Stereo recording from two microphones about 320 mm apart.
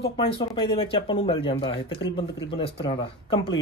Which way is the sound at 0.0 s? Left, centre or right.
Centre.